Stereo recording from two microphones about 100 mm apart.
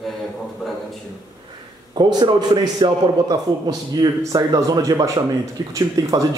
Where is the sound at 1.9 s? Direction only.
45° right (ahead or behind).